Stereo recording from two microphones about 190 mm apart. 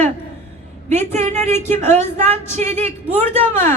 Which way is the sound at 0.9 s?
35° right (ahead or behind).